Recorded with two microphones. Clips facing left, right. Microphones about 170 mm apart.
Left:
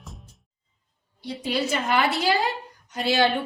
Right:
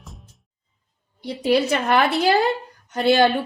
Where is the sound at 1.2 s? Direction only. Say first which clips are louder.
Right 7 dB; 65° right (ahead or behind).